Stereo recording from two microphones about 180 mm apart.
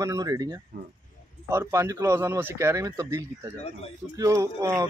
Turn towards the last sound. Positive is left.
turn(degrees=-20)  # may be behind; listen again after turning